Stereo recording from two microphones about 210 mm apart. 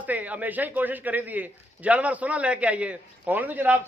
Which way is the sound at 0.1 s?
5° right (ahead or behind).